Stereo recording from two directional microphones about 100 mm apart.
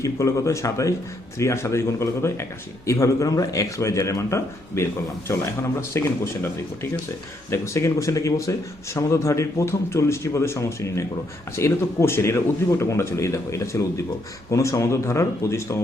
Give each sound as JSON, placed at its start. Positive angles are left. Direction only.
{"t": 0.0, "sound": "a man's voice", "side_deg": 30}
{"t": 7.5, "sound": "speech", "side_deg": 30}